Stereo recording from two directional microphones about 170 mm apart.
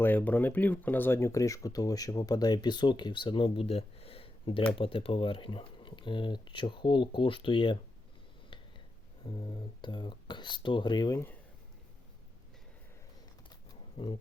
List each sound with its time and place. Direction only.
0.0 s speech: 10° left (ahead or behind); by 7.8 s 30° left (ahead or behind)
9.2 s speech: 30° left (ahead or behind)
13.7 s wild animals: 30° left (ahead or behind)